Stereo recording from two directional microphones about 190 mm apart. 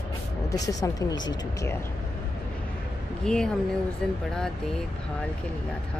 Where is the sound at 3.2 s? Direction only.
5° left (ahead or behind).